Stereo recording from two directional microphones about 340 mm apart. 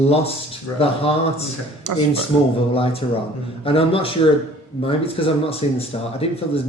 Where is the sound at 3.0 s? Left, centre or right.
Centre.